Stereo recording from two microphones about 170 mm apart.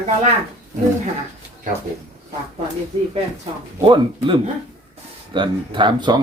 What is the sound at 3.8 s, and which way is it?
Speech, 30° right (ahead or behind).